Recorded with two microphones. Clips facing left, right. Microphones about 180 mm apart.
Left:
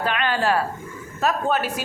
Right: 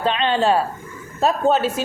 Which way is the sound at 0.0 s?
25° right (ahead or behind).